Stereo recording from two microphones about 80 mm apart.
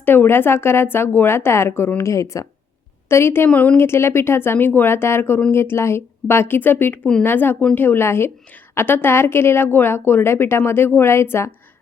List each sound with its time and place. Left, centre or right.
0.0 s a woman's voice: left
3.1 s a woman's voice: left
3.5 s a woman's voice: centre
3.8 s a woman's voice: left